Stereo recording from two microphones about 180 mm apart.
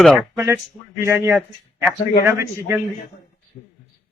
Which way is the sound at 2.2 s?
15° right (ahead or behind).